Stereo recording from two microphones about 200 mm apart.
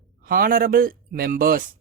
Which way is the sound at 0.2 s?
45° right (ahead or behind).